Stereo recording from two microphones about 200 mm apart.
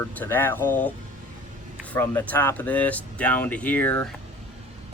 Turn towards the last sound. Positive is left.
turn(degrees=10)  # may be behind; listen again after turning